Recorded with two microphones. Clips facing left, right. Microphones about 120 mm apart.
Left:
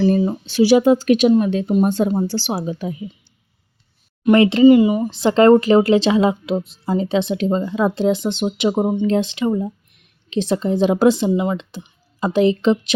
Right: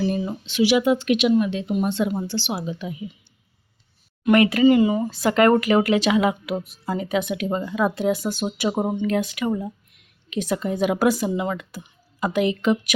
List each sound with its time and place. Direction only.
0.0 s speech: 35° left (ahead or behind)
4.3 s speech: 25° left (ahead or behind)
8.8 s speech: 10° left (ahead or behind)
9.0 s speech: 25° left (ahead or behind)